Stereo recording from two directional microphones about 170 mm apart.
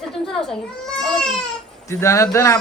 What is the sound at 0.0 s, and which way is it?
Speech, centre (ahead or behind).